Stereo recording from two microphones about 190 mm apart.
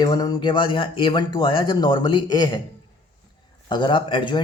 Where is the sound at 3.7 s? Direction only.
25° left (ahead or behind).